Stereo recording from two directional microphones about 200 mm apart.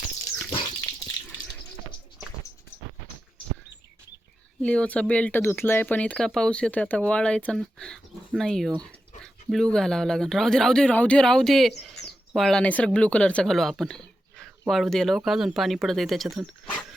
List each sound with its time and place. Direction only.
0.5 s dog: 25° left (ahead or behind)
4.6 s speech: 5° left (ahead or behind)